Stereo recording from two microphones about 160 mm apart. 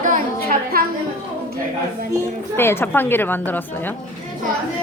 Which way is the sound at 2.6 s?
15° left (ahead or behind).